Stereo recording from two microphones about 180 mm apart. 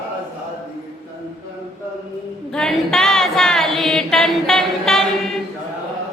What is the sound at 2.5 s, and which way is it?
Chant, 5° left (ahead or behind).